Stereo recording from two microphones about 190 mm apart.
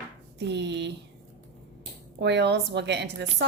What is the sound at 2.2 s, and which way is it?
A woman's voice, 65° right (ahead or behind).